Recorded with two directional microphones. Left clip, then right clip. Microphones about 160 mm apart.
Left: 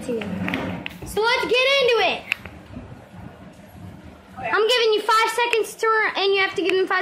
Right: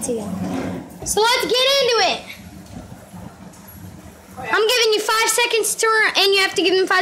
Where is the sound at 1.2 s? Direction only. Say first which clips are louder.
Right 4 dB; 30° right (ahead or behind).